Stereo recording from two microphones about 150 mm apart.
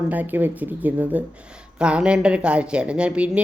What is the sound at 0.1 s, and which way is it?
A woman's voice, 10° right (ahead or behind).